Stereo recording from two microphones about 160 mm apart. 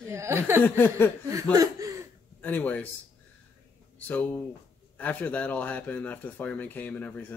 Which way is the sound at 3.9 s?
10° left (ahead or behind).